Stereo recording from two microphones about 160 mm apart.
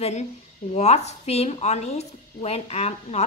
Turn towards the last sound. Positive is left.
turn(degrees=40)  # may be behind; listen again after turning